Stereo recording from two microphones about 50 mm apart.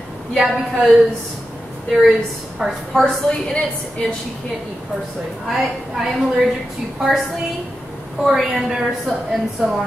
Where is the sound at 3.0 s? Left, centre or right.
Centre.